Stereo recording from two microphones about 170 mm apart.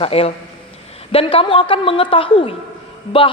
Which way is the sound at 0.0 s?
35° left (ahead or behind).